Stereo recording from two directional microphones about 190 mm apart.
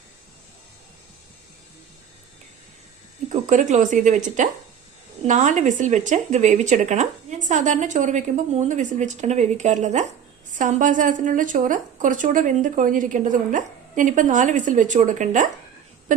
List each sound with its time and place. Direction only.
3.2 s speech: 40° right (ahead or behind)